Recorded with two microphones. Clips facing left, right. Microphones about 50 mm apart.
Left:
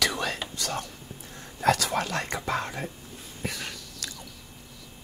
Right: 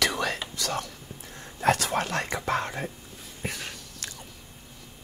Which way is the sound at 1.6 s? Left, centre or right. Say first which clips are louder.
Even; right.